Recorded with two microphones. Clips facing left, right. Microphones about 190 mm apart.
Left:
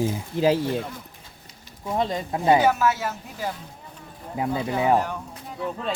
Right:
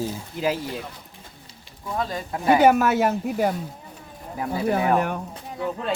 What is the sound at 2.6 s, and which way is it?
Speech, 60° right (ahead or behind).